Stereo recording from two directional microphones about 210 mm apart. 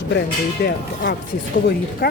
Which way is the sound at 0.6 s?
55° left (ahead or behind).